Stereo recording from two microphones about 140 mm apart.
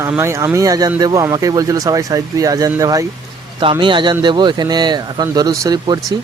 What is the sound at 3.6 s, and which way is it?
Speech, 35° right (ahead or behind).